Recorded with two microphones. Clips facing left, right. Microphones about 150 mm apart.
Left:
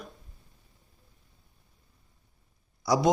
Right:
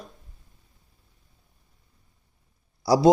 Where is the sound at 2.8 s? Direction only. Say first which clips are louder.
Right 5 dB; 30° right (ahead or behind).